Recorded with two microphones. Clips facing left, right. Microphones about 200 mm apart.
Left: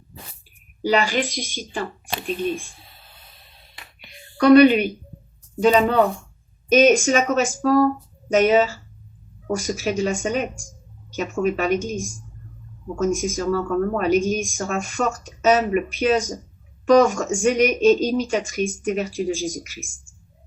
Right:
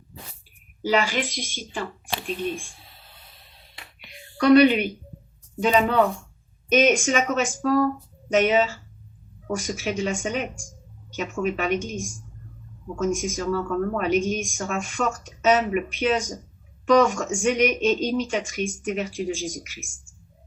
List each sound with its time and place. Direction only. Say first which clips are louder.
0.9 s speech: left 3 dB; 35° left (ahead or behind)
4.4 s speech: left 3 dB; 40° left (ahead or behind)